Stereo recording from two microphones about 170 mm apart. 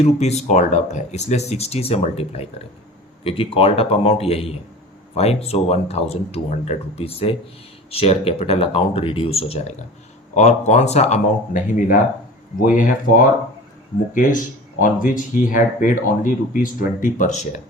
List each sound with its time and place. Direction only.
0.0 s speech: 40° left (ahead or behind)
14.1 s speech: 50° left (ahead or behind)